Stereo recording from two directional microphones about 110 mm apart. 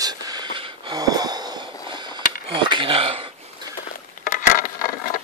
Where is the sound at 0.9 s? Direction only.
35° right (ahead or behind).